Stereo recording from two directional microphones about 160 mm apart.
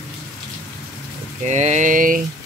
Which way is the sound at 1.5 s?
45° right (ahead or behind).